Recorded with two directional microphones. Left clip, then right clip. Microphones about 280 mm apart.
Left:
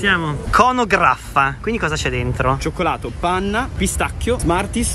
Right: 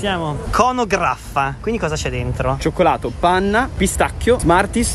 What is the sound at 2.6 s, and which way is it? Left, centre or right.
Speech, right.